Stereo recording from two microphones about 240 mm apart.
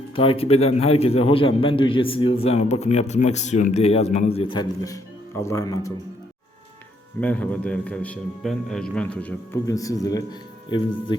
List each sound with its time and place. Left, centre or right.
0.2 s a man's voice: left
7.2 s a man's voice: centre